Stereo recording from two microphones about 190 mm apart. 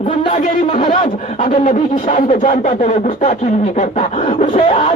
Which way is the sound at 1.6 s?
45° left (ahead or behind).